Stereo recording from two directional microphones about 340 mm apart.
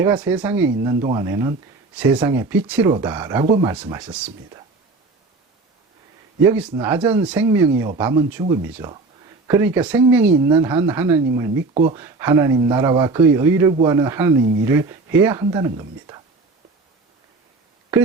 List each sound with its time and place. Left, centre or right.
0.0 s speech: centre
6.7 s speech: centre
11.9 s speech: centre